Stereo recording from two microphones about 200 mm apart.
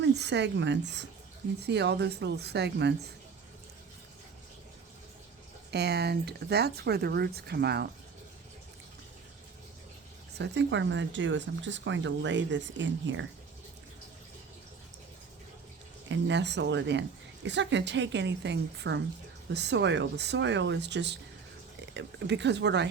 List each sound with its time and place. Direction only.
0.0 s a woman's voice: 55° right (ahead or behind)
5.7 s a woman's voice: 55° right (ahead or behind)
10.3 s a woman's voice: 60° right (ahead or behind)
16.0 s a woman's voice: 60° right (ahead or behind)